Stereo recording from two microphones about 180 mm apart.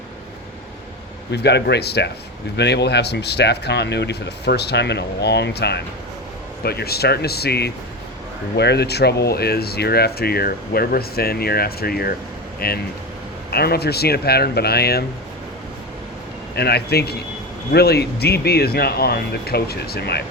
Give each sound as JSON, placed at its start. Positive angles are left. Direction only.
{"t": 1.3, "sound": "speech", "side_deg": 70}
{"t": 16.6, "sound": "speech", "side_deg": 65}